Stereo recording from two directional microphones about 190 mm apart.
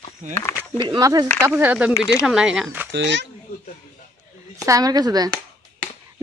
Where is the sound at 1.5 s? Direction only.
10° right (ahead or behind).